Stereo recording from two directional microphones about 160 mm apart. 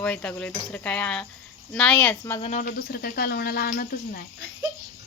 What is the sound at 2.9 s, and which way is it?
Speech, 75° left (ahead or behind).